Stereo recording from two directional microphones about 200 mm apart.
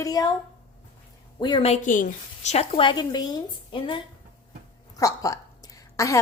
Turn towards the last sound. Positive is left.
turn(degrees=15)  # may be behind; listen again after turning